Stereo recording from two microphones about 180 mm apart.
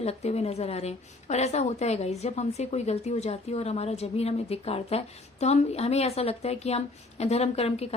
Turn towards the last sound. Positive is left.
turn(degrees=35)  # may be behind; listen again after turning